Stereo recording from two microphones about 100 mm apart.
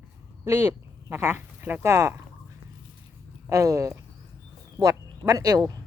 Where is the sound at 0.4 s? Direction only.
25° right (ahead or behind).